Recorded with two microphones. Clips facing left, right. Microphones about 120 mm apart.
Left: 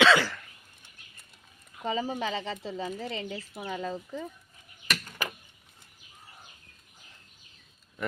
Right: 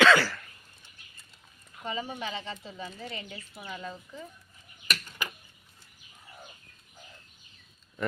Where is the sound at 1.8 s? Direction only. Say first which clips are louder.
Left 5 dB; 35° left (ahead or behind).